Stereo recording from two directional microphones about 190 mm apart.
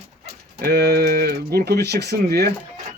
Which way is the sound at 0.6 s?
60° right (ahead or behind).